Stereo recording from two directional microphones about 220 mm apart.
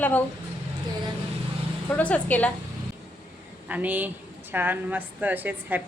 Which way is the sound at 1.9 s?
5° left (ahead or behind).